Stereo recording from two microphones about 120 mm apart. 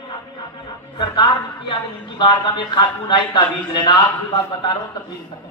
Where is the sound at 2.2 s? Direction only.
40° left (ahead or behind).